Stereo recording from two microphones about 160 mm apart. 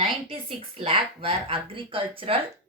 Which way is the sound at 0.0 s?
35° right (ahead or behind).